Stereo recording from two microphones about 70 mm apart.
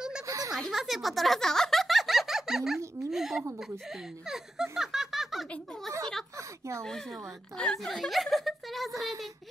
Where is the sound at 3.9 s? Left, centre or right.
Centre.